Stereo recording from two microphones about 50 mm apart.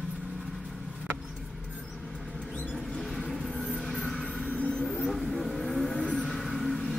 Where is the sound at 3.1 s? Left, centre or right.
Centre.